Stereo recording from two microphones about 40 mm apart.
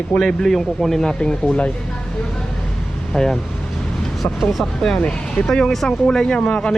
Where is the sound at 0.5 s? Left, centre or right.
Centre.